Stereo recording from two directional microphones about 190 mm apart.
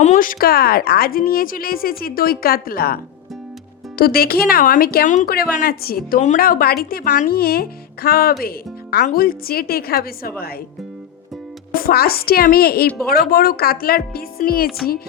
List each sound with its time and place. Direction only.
0.0 s speech: 40° left (ahead or behind)
11.7 s speech: 50° left (ahead or behind)
12.9 s speech: centre (ahead or behind)
13.1 s speech: 55° left (ahead or behind)